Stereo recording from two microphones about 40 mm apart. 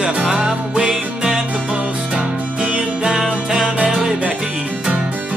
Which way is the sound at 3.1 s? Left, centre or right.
Centre.